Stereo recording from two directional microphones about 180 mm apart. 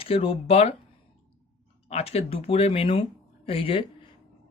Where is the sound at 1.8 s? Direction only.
35° left (ahead or behind).